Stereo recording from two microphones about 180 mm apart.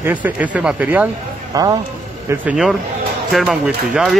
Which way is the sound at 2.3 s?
5° right (ahead or behind).